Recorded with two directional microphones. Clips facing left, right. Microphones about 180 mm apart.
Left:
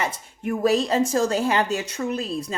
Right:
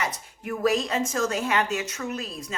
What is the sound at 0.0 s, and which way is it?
A woman's voice, 30° left (ahead or behind).